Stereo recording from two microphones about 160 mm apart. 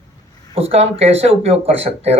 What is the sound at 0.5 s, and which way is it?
Speech, 40° right (ahead or behind).